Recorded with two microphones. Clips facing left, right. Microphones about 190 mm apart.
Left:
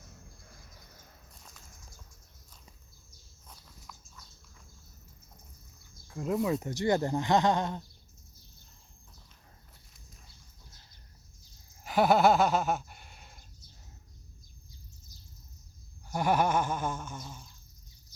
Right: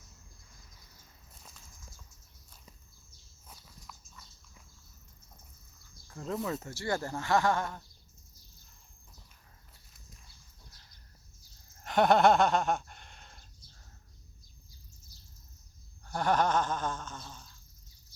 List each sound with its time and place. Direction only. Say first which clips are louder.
3.4 s walk: even; centre (ahead or behind)
6.1 s speech: left 5 dB; 10° left (ahead or behind)
11.8 s a sound: even; 5° left (ahead or behind)
16.0 s speech: left 1 dB; 10° left (ahead or behind)